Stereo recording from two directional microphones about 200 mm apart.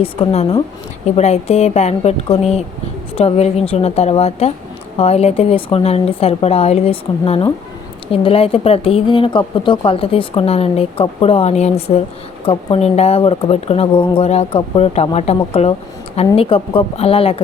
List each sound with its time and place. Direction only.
0.0 s speech: 30° left (ahead or behind)